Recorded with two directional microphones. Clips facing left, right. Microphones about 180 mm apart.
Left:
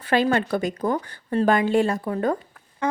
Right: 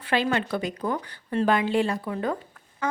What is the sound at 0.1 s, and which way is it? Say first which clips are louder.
A woman's voice: left 4 dB; 45° left (ahead or behind).